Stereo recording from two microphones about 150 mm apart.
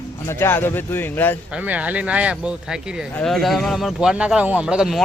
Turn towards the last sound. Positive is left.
turn(degrees=-5)  # may be behind; listen again after turning